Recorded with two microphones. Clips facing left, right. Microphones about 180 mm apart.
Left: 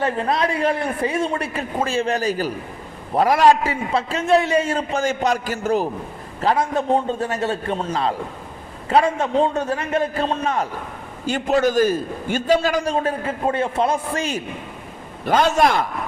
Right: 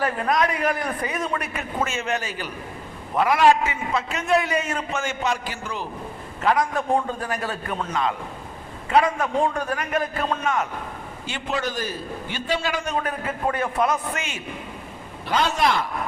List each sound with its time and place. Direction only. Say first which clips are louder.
0.0 s a man's voice: left 2 dB; 30° left (ahead or behind); by 5.9 s 45° left (ahead or behind)
6.4 s a man's voice: left 2 dB; 30° left (ahead or behind)
11.3 s a man's voice: left 10 dB; 40° left (ahead or behind)
15.2 s a man's voice: left 5 dB; 50° left (ahead or behind)